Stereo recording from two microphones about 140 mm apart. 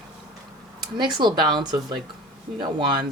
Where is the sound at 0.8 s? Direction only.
35° right (ahead or behind).